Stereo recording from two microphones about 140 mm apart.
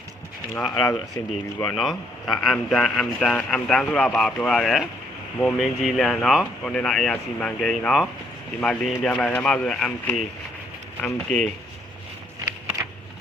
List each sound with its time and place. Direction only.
0.7 s speech: 20° left (ahead or behind)
1.6 s a man's voice: 5° left (ahead or behind)